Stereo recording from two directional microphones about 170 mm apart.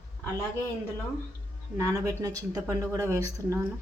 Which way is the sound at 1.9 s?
20° right (ahead or behind).